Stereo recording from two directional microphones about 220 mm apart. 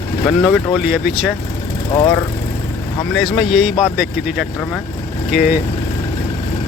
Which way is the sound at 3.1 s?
Centre (ahead or behind).